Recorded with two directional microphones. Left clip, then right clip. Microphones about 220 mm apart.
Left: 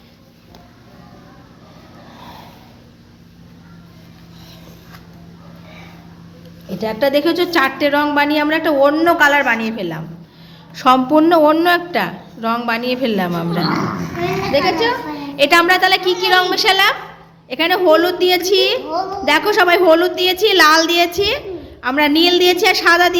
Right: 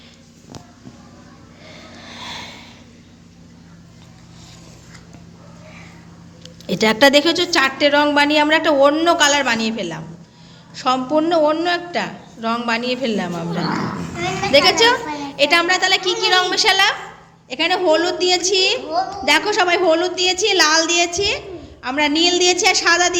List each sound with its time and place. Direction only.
6.7 s speech: 40° right (ahead or behind)
7.3 s a woman's voice: centre (ahead or behind)
10.8 s a woman's voice: 20° left (ahead or behind)
14.5 s a child's voice: 15° right (ahead or behind)
15.2 s a woman's voice: 5° left (ahead or behind)